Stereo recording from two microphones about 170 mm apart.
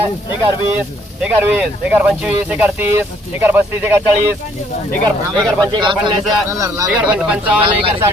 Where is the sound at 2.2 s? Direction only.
10° right (ahead or behind).